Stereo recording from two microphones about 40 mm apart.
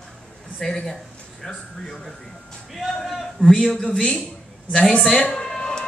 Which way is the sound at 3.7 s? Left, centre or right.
Left.